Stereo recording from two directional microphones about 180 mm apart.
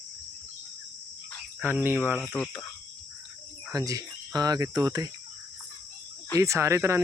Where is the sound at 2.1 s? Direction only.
5° left (ahead or behind).